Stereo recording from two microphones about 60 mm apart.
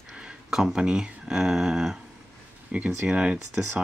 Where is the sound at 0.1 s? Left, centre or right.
Centre.